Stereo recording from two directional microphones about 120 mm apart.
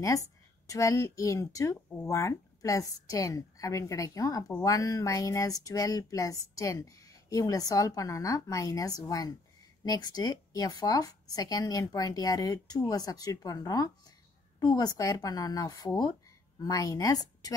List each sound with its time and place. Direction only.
0.0 s a woman's voice: 25° left (ahead or behind)